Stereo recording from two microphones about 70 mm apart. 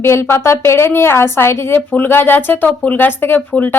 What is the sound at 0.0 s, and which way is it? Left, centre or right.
Speech, left.